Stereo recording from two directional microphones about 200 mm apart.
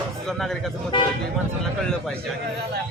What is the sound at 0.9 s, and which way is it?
Speech, 25° left (ahead or behind).